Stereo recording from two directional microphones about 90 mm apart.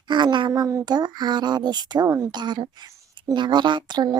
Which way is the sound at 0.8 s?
50° right (ahead or behind).